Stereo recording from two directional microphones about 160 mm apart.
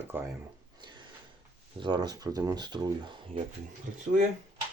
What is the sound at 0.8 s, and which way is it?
Wood, 30° right (ahead or behind).